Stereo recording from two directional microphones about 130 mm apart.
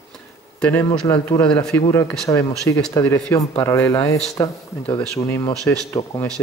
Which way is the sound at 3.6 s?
20° left (ahead or behind).